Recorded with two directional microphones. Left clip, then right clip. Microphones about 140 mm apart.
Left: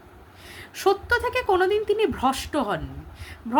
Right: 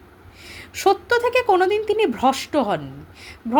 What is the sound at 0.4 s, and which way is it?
Speech, 25° right (ahead or behind).